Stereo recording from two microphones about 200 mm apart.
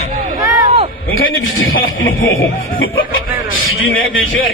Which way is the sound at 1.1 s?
85° left.